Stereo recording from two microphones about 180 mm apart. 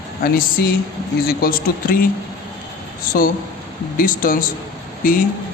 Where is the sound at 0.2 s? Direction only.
55° left (ahead or behind).